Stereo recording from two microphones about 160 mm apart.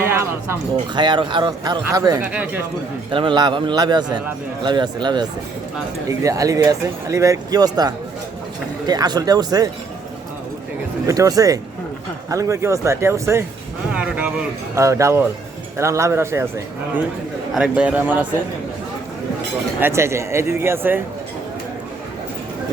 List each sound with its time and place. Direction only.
0.0 s a sound: 15° right (ahead or behind)
0.9 s speech: 30° right (ahead or behind)
2.2 s speech: 10° right (ahead or behind)
3.1 s speech: 30° right (ahead or behind)
11.0 s speech: 20° right (ahead or behind)
14.8 s speech: 20° right (ahead or behind)
17.5 s speech: 5° right (ahead or behind)
19.8 s speech: 15° right (ahead or behind)